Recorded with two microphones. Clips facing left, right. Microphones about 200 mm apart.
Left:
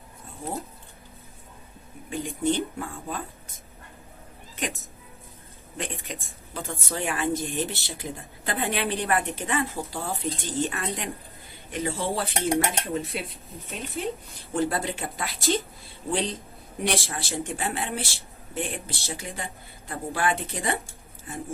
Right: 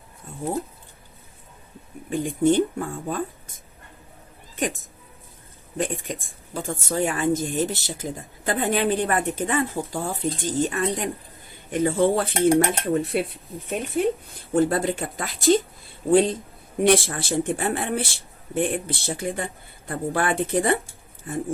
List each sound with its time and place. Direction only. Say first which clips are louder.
2.0 s a woman's voice: right 6 dB; 50° right (ahead or behind)
9.6 s speech: right 4 dB; 15° right (ahead or behind)
10.4 s speech: right 7 dB; 45° right (ahead or behind)